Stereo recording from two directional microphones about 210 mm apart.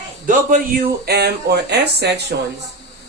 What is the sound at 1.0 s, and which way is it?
A man's voice, 50° right (ahead or behind).